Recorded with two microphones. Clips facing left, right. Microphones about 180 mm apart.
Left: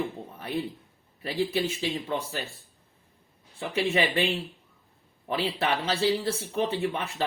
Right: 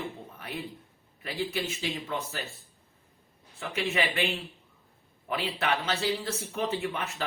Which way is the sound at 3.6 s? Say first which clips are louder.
Left 4 dB; 30° left (ahead or behind).